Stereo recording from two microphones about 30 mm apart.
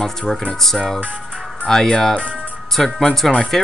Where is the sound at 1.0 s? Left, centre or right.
Right.